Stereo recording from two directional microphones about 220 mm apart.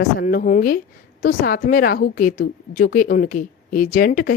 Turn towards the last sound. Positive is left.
turn(degrees=40)  # may be behind; listen again after turning